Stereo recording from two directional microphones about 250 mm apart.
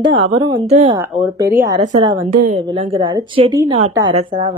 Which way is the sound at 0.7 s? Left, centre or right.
Right.